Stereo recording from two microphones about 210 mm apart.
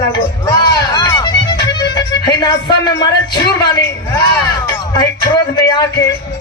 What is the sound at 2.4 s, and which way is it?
Speech, 20° left (ahead or behind).